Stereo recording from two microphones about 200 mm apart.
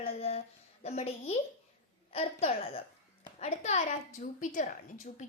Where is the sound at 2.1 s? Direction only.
30° left (ahead or behind).